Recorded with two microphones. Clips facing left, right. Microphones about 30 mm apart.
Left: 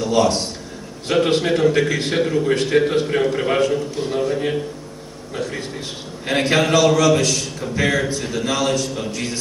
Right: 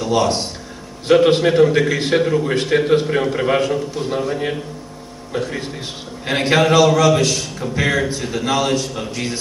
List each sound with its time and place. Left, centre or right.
0.0 s a man's voice: centre
6.2 s a man's voice: centre